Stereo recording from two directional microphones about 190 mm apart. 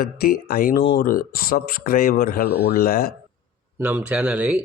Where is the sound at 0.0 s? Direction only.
50° left (ahead or behind).